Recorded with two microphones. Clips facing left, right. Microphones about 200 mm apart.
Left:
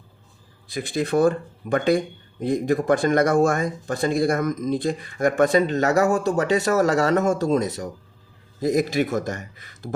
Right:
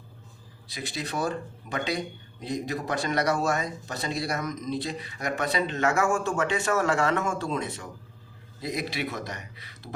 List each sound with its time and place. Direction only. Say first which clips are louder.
0.7 s speech: left 11 dB; 50° left (ahead or behind)